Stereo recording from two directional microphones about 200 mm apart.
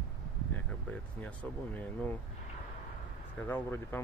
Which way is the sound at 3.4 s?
10° left (ahead or behind).